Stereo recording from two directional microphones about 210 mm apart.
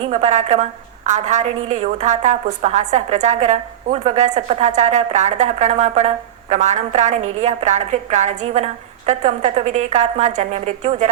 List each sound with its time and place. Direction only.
0.0 s a woman's voice: 35° right (ahead or behind)
7.2 s a woman's voice: 90° right
7.4 s a woman's voice: 35° right (ahead or behind)